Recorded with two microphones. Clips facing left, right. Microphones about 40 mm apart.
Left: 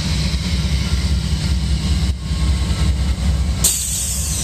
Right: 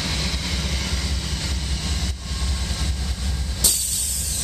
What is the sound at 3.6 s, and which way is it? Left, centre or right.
Vehicle, left.